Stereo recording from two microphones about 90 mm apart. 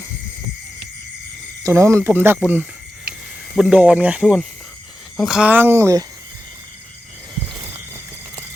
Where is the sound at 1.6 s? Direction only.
30° right (ahead or behind).